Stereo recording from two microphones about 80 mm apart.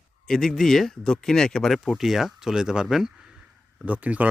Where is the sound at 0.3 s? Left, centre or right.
Centre.